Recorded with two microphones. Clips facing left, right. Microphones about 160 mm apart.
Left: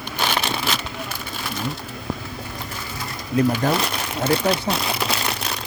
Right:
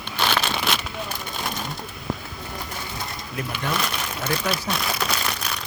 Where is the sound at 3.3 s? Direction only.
35° left (ahead or behind).